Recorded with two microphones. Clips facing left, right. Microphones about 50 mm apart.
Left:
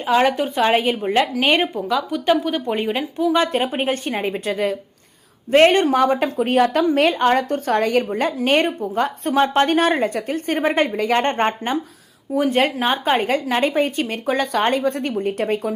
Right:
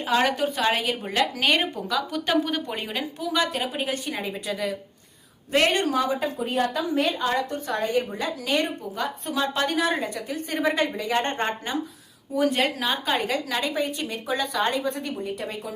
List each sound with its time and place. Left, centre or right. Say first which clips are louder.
0.0 s a woman's voice: left 5 dB; centre
2.6 s a woman's voice: left 8 dB; left
6.0 s speech: left 7 dB; left
7.3 s a woman's voice: left 8 dB; left
7.8 s speech: left 5 dB; left
8.4 s a woman's voice: left 7 dB; left
14.9 s speech: left 8 dB; left